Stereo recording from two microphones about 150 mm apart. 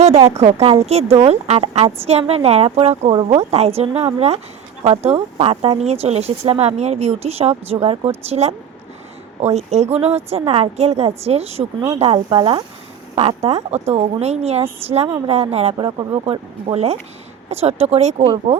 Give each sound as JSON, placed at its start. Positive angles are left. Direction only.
{"t": 0.0, "sound": "speech", "side_deg": -45}
{"t": 13.1, "sound": "speech", "side_deg": -40}